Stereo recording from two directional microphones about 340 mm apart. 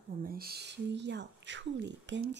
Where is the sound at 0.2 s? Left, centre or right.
Right.